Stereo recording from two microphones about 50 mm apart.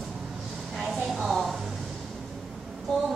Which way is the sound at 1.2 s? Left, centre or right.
Centre.